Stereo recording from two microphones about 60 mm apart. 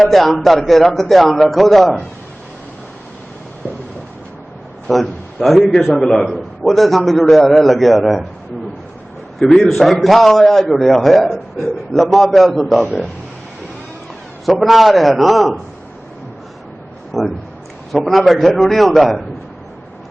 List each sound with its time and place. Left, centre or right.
0.0 s a man's voice: centre
4.9 s a man's voice: centre
9.6 s a man's voice: centre
14.4 s a man's voice: centre
17.1 s a man's voice: centre